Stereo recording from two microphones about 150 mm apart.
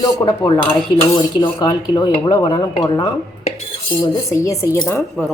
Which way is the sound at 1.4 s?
30° left (ahead or behind).